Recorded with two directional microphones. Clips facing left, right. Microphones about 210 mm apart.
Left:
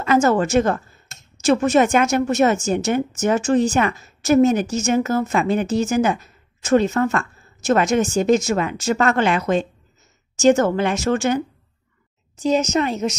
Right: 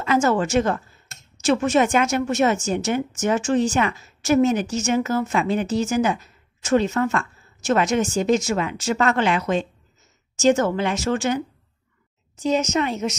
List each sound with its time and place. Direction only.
0.0 s a woman's voice: 45° left (ahead or behind)
12.4 s speech: 40° left (ahead or behind)